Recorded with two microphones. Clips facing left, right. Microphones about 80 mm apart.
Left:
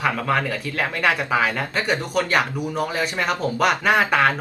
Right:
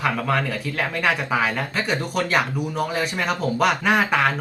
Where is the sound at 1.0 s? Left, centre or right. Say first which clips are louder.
Left 2 dB; centre.